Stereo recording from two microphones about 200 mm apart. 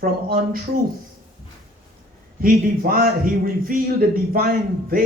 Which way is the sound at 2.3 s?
45° right (ahead or behind).